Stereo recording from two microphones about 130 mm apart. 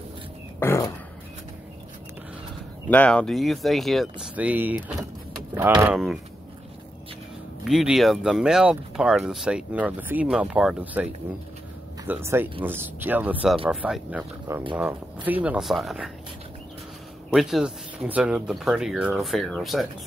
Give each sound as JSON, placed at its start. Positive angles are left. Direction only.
{"t": 0.6, "sound": "a sound", "side_deg": 20}
{"t": 2.9, "sound": "speech", "side_deg": 10}
{"t": 4.4, "sound": "speech", "side_deg": -10}
{"t": 7.6, "sound": "speech", "side_deg": -5}
{"t": 12.1, "sound": "speech", "side_deg": -20}
{"t": 14.5, "sound": "speech", "side_deg": -20}
{"t": 17.3, "sound": "speech", "side_deg": -5}